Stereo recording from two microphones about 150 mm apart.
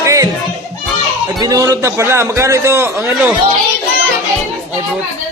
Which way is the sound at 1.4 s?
25° right (ahead or behind).